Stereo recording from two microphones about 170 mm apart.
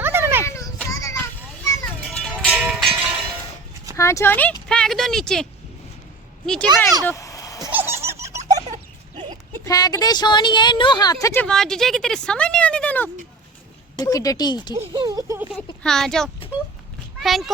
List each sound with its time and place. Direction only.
0.0 s children playing: 15° right (ahead or behind)
0.4 s children playing: 15° left (ahead or behind)
2.1 s music: 5° left (ahead or behind)
3.9 s speech: 15° left (ahead or behind)
7.0 s a sound: 15° left (ahead or behind)
7.7 s a sound: 10° right (ahead or behind)
9.6 s a woman's voice: 20° left (ahead or behind)
11.4 s speech: 5° left (ahead or behind)
13.9 s a woman's voice: 20° left (ahead or behind)
14.8 s speech: 25° right (ahead or behind)
15.8 s speech: 5° left (ahead or behind)